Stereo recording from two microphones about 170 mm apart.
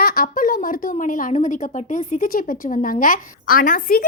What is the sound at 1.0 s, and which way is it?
A woman's voice, 45° left (ahead or behind).